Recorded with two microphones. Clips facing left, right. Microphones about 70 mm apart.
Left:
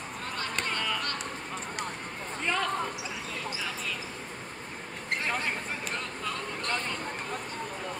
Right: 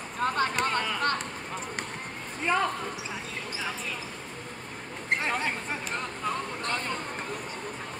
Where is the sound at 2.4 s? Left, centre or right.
Centre.